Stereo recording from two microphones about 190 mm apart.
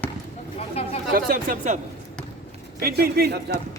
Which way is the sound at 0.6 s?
30° left (ahead or behind).